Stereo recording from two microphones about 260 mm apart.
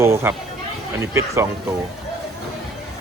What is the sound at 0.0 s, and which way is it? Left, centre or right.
Speech, centre.